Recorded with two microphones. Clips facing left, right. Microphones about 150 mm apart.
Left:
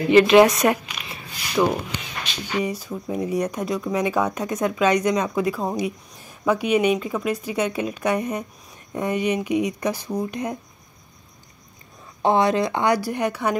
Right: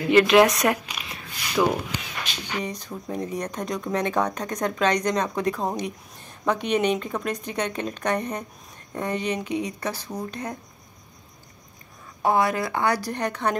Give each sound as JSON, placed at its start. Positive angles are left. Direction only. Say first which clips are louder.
{"t": 0.1, "sound": "speech", "louder": "left 3 dB", "side_deg": 0}
{"t": 12.2, "sound": "speech", "louder": "left 3 dB", "side_deg": 25}